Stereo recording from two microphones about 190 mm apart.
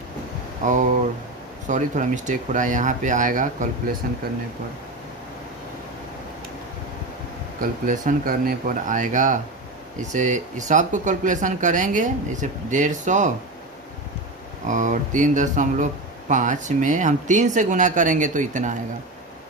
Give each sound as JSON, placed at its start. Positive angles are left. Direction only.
{"t": 0.6, "sound": "speech", "side_deg": -40}
{"t": 7.6, "sound": "speech", "side_deg": -45}
{"t": 14.7, "sound": "speech", "side_deg": -40}